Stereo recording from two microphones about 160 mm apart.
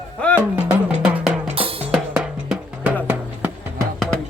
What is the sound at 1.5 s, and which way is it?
Drum, 35° right (ahead or behind).